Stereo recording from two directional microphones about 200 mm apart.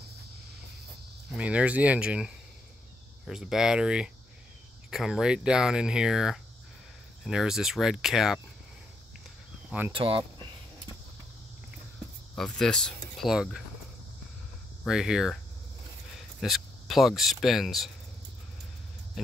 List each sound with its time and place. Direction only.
1.3 s speech: 5° right (ahead or behind)
9.7 s speech: 10° right (ahead or behind)
9.9 s speech: 25° right (ahead or behind)
12.4 s speech: 5° left (ahead or behind)
14.9 s speech: 5° right (ahead or behind)
19.2 s speech: centre (ahead or behind)